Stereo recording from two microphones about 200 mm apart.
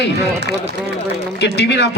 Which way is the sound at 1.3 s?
60° left (ahead or behind).